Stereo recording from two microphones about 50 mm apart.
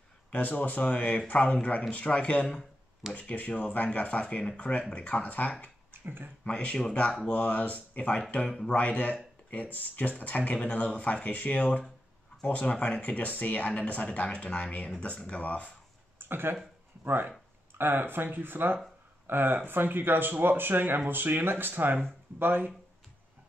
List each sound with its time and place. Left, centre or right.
0.3 s speech: left
6.0 s speech: right
6.4 s speech: left
16.2 s a sound: right
17.0 s speech: right